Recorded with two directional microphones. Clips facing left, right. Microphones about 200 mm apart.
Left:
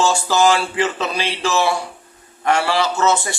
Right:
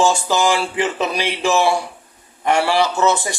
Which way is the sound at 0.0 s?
15° right (ahead or behind).